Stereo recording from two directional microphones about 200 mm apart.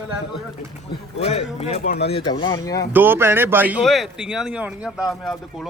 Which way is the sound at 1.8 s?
55° left (ahead or behind).